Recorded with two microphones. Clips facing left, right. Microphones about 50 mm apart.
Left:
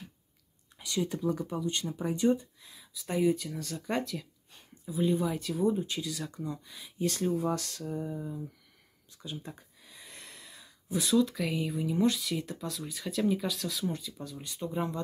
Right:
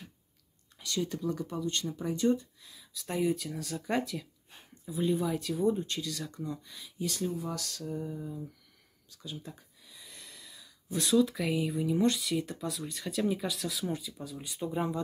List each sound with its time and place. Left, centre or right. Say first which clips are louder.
0.7 s speech: left 1 dB; centre
2.8 s a sound: right 2 dB; centre
3.1 s speech: left 2 dB; centre
7.0 s speech: left 4 dB; left
8.0 s a sound: left 2 dB; left
11.0 s speech: even; centre